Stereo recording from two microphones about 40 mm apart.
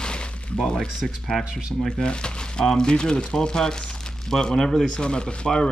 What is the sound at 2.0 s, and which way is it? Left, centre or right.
Speech, left.